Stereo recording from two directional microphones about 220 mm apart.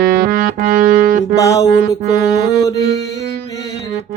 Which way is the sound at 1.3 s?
15° left (ahead or behind).